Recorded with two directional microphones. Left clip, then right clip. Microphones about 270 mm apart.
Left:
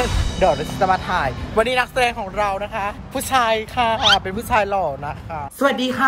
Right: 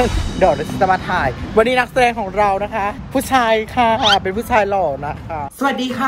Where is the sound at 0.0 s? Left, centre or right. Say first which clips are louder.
Right 3 dB; centre.